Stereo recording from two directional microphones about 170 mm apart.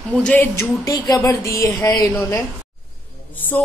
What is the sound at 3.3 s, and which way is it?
Speech, 10° left (ahead or behind).